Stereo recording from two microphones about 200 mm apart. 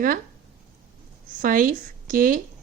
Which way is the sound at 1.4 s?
45° right (ahead or behind).